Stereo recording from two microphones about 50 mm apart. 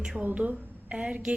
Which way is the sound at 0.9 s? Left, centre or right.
Centre.